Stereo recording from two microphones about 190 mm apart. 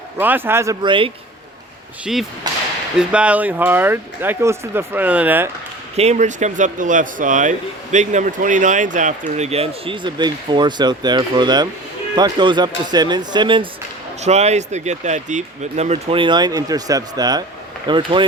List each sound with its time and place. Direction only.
0.2 s speech: 10° right (ahead or behind); by 1.1 s 25° right (ahead or behind)
2.1 s speech: centre (ahead or behind)
2.5 s speech: 20° right (ahead or behind)
3.0 s speech: 5° right (ahead or behind)
6.0 s speech: 35° right (ahead or behind)
14.2 s speech: 35° right (ahead or behind)